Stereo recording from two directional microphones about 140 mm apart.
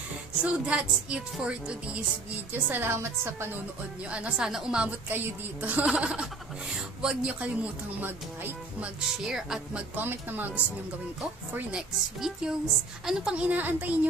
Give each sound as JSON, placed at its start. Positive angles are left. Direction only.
{"t": 0.4, "sound": "speech", "side_deg": -10}
{"t": 4.1, "sound": "speech", "side_deg": -5}